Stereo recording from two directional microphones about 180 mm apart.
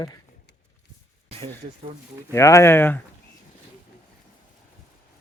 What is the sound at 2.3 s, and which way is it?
Speech, 15° left (ahead or behind).